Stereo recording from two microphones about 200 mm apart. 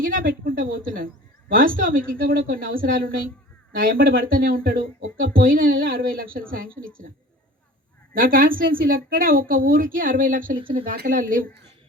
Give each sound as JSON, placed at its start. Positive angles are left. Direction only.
{"t": 0.0, "sound": "a woman's voice", "side_deg": -45}
{"t": 8.1, "sound": "a woman's voice", "side_deg": -45}